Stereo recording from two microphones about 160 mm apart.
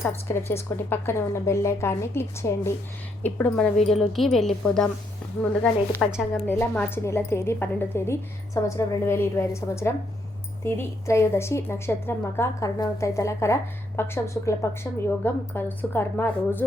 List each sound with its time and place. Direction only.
0.0 s a woman's voice: 15° left (ahead or behind)
6.0 s a woman's voice: 5° left (ahead or behind)
6.5 s a woman's voice: 15° left (ahead or behind)